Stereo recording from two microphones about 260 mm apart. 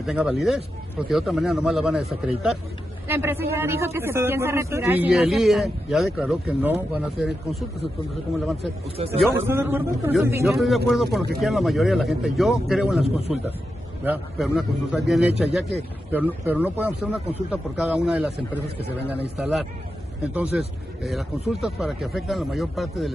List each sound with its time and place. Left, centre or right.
0.0 s a man's voice: centre
8.9 s speech: right
9.5 s a man's voice: centre